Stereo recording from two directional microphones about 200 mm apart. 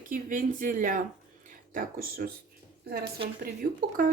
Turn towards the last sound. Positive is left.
turn(degrees=-45)  # may be behind; listen again after turning